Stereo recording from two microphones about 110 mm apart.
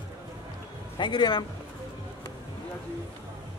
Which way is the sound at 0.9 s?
45° left (ahead or behind).